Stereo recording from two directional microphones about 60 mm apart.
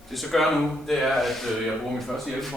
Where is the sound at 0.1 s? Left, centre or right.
Centre.